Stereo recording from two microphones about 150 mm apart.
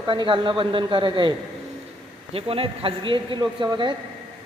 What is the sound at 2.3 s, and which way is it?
A man's voice, 40° right (ahead or behind).